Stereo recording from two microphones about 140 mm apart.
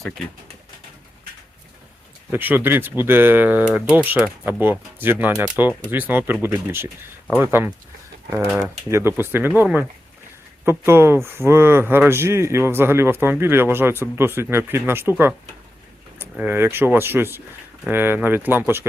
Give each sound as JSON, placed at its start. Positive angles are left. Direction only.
{"t": 2.3, "sound": "speech", "side_deg": -15}
{"t": 16.4, "sound": "speech", "side_deg": -15}